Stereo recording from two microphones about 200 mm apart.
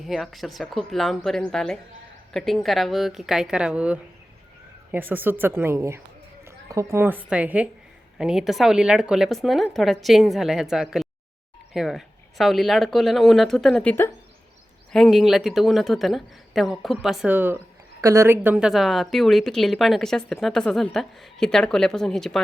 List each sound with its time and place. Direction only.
0.0 s a woman's voice: centre (ahead or behind)